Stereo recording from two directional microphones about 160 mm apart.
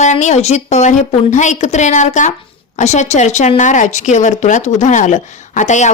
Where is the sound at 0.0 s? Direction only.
50° left (ahead or behind).